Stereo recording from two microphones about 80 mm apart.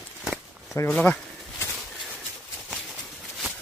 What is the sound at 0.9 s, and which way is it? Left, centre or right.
Speech, centre.